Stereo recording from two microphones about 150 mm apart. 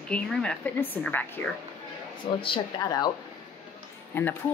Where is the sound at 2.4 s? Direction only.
35° left (ahead or behind).